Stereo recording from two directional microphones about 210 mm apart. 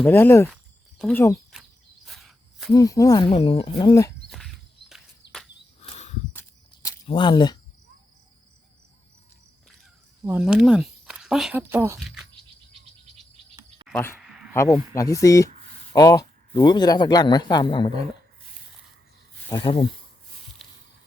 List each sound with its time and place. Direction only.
0.0 s speech: 10° left (ahead or behind)
0.5 s a sound: centre (ahead or behind)
1.1 s speech: 10° left (ahead or behind)
2.0 s a sound: centre (ahead or behind)
2.7 s speech: 15° left (ahead or behind)
4.3 s a sound: centre (ahead or behind)
7.1 s speech: 20° left (ahead or behind)
10.2 s speech: 5° right (ahead or behind)
13.9 s speech: 10° left (ahead or behind)
14.2 s a sound: centre (ahead or behind)
14.5 s speech: 15° left (ahead or behind)
19.5 s speech: 20° left (ahead or behind)